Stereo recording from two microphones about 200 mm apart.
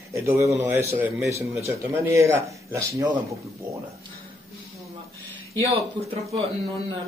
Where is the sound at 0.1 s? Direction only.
15° right (ahead or behind).